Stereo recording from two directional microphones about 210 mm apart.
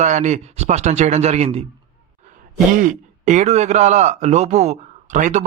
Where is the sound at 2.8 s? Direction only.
35° right (ahead or behind).